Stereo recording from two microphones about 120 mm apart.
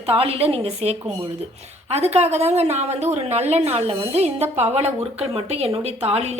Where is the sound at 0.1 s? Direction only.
55° right (ahead or behind).